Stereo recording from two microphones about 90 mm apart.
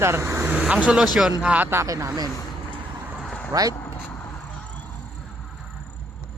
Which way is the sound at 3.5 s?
40° right (ahead or behind).